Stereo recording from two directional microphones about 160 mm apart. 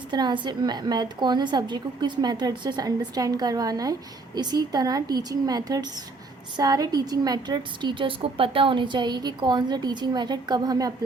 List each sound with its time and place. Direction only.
0.1 s a woman's voice: 25° right (ahead or behind)